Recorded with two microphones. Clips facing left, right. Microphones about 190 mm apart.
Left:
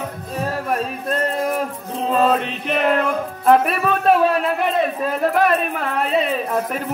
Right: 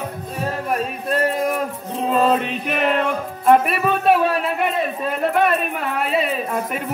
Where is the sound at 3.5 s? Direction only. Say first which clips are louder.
Even; centre (ahead or behind).